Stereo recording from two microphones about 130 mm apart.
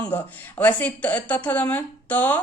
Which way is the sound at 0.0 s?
15° left (ahead or behind).